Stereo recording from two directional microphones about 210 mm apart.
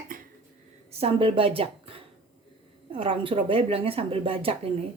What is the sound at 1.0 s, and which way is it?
Speech, 25° right (ahead or behind).